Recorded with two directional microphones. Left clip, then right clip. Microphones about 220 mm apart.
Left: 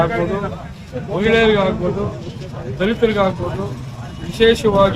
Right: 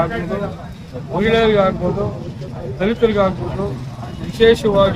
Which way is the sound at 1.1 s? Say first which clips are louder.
Even; centre (ahead or behind).